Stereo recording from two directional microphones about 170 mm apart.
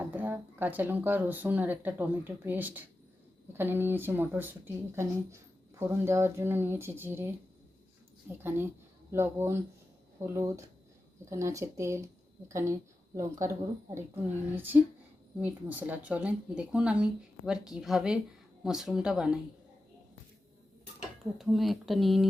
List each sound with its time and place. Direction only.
0.0 s speech: 10° right (ahead or behind)
9.1 s speech: 15° right (ahead or behind)
14.5 s speech: 10° right (ahead or behind)
21.3 s speech: centre (ahead or behind)